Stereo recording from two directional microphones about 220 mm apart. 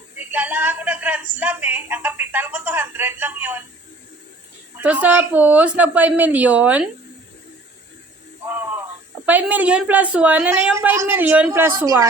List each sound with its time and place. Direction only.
0.3 s speech: 10° right (ahead or behind)
4.8 s a woman's voice: 5° right (ahead or behind)
9.2 s a woman's voice: 5° right (ahead or behind)